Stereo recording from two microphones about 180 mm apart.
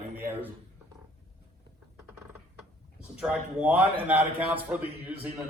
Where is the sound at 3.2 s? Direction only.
5° right (ahead or behind).